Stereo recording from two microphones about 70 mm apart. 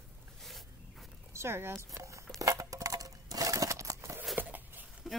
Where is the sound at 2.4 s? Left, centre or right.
Right.